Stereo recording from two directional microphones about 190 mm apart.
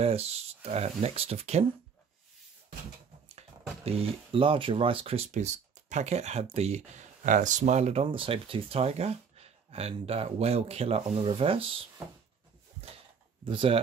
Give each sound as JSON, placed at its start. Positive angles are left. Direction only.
{"t": 0.0, "sound": "speech", "side_deg": -30}
{"t": 3.8, "sound": "speech", "side_deg": -30}
{"t": 13.5, "sound": "speech", "side_deg": -30}